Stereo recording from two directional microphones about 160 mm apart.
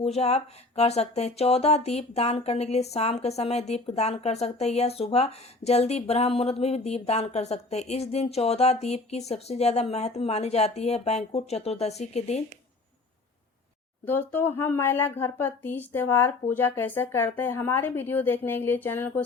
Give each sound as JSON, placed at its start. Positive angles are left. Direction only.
{"t": 0.0, "sound": "speech", "side_deg": 40}
{"t": 14.0, "sound": "speech", "side_deg": 10}